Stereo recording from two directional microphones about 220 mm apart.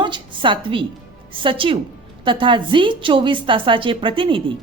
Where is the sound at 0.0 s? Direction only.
20° right (ahead or behind).